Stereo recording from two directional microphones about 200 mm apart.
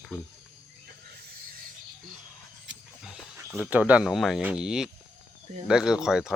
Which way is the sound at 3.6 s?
10° right (ahead or behind).